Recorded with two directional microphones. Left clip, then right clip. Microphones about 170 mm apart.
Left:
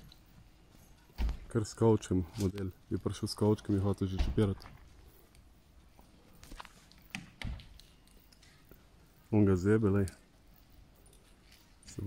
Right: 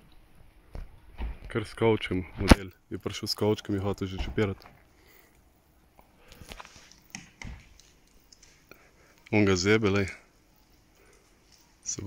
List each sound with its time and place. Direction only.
1.2 s a sound: 10° left (ahead or behind)
1.5 s speech: 15° right (ahead or behind)
3.1 s speech: centre (ahead or behind)
9.3 s speech: 25° right (ahead or behind)